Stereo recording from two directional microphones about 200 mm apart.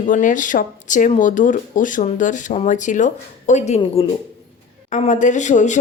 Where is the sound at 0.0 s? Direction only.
40° left (ahead or behind).